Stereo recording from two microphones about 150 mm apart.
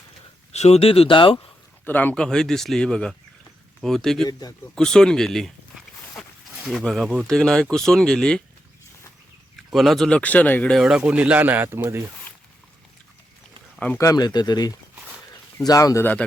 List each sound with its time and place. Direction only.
0.5 s speech: 45° left (ahead or behind)
1.8 s speech: 10° left (ahead or behind)
4.3 s speech: 25° left (ahead or behind)
4.7 s speech: 5° left (ahead or behind)
6.1 s a sound: 5° right (ahead or behind)
7.3 s speech: 5° left (ahead or behind)
9.6 s speech: centre (ahead or behind); by 12.0 s 15° right (ahead or behind)
13.7 s speech: 10° left (ahead or behind)
14.0 s speech: 25° left (ahead or behind)